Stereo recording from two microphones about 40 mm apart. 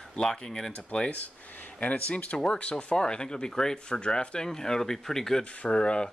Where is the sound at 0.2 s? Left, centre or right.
Centre.